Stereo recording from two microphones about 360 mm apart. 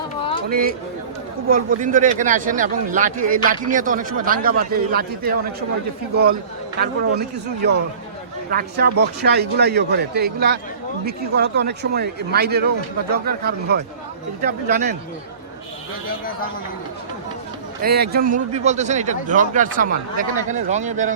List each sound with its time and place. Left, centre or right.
1.5 s a man's voice: right
6.7 s a man's voice: right
16.0 s a man's voice: left
17.8 s a man's voice: right